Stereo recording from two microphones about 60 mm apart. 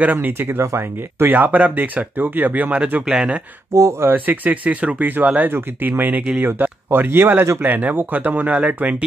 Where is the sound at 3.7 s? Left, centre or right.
Right.